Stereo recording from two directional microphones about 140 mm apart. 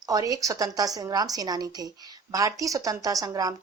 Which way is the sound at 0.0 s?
25° right (ahead or behind).